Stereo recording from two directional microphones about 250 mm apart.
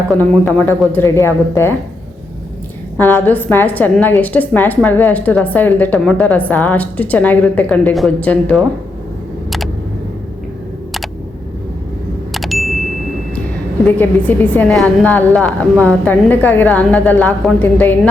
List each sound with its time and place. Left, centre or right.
0.1 s a woman's voice: centre
3.0 s a woman's voice: centre
12.3 s vehicle: centre
13.8 s a woman's voice: centre